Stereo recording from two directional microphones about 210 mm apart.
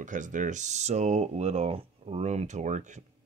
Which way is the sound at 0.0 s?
35° right (ahead or behind).